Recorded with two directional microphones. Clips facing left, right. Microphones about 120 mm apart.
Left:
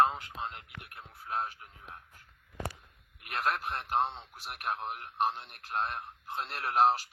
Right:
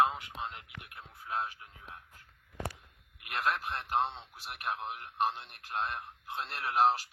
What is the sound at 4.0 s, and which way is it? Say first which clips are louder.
Speech: left 1 dB; centre (ahead or behind).